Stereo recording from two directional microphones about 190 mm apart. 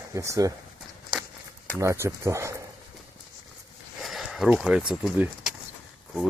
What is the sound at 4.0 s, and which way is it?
Speech, centre (ahead or behind).